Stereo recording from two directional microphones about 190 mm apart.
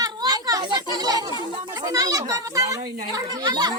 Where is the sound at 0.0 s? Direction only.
20° right (ahead or behind).